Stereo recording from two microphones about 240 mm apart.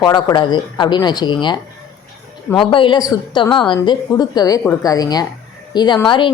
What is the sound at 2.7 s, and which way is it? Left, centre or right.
A woman's voice, centre.